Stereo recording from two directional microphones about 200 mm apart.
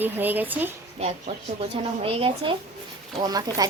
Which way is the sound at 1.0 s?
30° right (ahead or behind).